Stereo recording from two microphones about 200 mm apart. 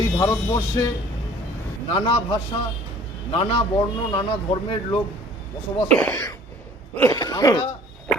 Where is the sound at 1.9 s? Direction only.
25° left (ahead or behind).